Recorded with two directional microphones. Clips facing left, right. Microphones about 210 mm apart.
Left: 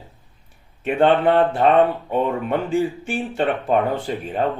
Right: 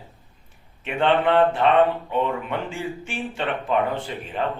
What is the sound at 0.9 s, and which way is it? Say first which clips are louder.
Speech: left 4 dB; 40° left (ahead or behind).